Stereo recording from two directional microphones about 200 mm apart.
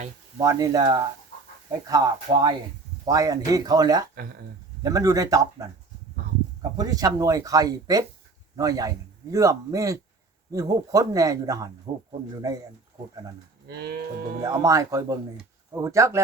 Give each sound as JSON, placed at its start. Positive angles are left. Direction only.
{"t": 0.3, "sound": "speech", "side_deg": -15}
{"t": 13.7, "sound": "cattle", "side_deg": -55}
{"t": 14.4, "sound": "speech", "side_deg": -15}